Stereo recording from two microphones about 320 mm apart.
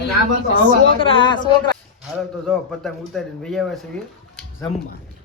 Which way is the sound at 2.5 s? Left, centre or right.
Centre.